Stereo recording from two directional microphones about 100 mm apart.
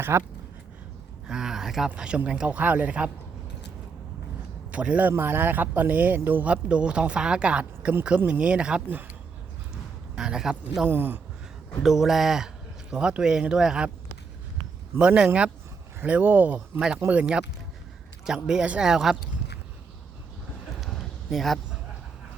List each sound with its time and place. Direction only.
0.0 s speech: 25° right (ahead or behind)
1.3 s speech: 5° right (ahead or behind)
4.7 s speech: 15° right (ahead or behind)
10.2 s a man's voice: 5° right (ahead or behind)
10.8 s speech: 20° right (ahead or behind)
11.8 s a man's voice: 5° right (ahead or behind)
14.9 s speech: 10° right (ahead or behind)
20.8 s a sound: 5° left (ahead or behind)